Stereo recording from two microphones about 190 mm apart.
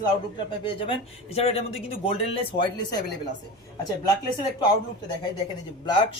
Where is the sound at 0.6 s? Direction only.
30° left (ahead or behind).